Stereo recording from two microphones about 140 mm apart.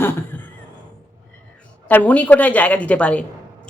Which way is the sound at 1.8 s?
10° left (ahead or behind).